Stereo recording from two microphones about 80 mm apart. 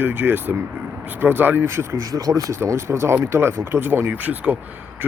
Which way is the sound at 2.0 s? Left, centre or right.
Right.